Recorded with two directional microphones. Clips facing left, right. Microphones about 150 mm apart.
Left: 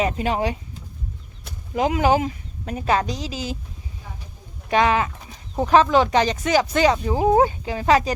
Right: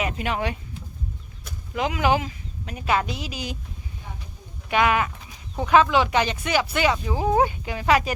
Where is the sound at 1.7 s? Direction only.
40° left (ahead or behind).